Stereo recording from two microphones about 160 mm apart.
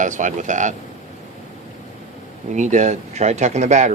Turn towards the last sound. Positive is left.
turn(degrees=-50)  # may be behind; listen again after turning